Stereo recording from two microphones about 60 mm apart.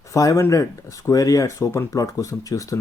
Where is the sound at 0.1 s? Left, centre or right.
Left.